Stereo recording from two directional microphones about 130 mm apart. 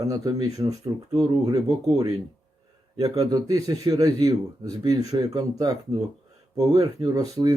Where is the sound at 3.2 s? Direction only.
30° right (ahead or behind).